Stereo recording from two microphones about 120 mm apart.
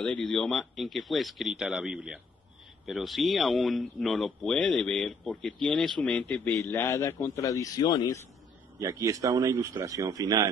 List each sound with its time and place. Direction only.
0.0 s speech: 5° left (ahead or behind); by 8.2 s 35° left (ahead or behind)
8.7 s speech: 25° right (ahead or behind)